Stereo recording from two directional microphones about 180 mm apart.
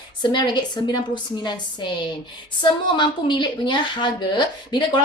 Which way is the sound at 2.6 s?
25° left (ahead or behind).